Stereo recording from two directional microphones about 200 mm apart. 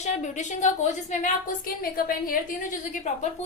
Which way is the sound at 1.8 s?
45° left (ahead or behind).